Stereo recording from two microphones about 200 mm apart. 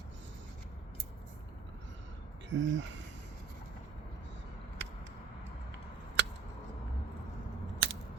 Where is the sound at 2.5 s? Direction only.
65° right (ahead or behind).